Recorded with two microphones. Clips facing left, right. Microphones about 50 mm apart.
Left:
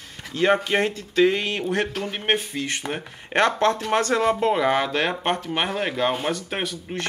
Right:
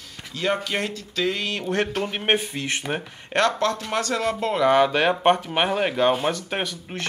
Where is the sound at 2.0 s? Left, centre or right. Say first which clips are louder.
Right 1 dB; centre.